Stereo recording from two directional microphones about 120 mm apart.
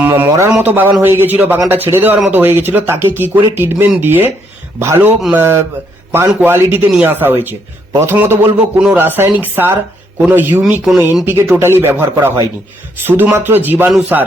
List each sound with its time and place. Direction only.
0.0 s a sound: 15° right (ahead or behind)
0.3 s speech: 25° right (ahead or behind)
0.6 s speech: 15° right (ahead or behind)
10.8 s speech: 5° right (ahead or behind)
11.4 s speech: 20° right (ahead or behind)